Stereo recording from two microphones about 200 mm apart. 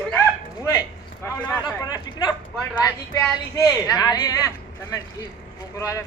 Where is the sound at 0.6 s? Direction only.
15° left (ahead or behind).